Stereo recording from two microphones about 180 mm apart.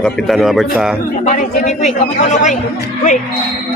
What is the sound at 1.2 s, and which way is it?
A woman's voice, 40° left (ahead or behind).